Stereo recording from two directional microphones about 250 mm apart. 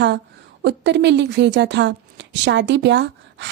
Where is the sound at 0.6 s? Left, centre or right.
Right.